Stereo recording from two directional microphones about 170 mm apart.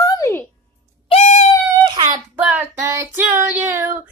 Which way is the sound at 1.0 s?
40° left (ahead or behind).